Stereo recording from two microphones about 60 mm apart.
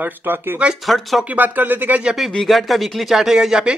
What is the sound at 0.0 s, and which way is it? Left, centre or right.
Speech, right.